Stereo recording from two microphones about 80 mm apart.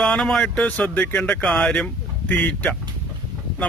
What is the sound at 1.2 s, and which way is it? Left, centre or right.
Speech, centre.